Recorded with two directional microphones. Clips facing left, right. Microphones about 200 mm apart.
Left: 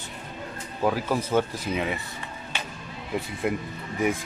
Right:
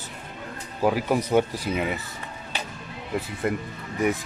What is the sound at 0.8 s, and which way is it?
Speech, 15° right (ahead or behind).